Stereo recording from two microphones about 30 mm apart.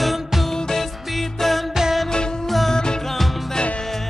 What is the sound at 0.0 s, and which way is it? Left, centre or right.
Music, centre.